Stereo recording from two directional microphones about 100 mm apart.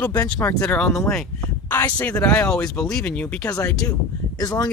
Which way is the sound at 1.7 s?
20° left (ahead or behind).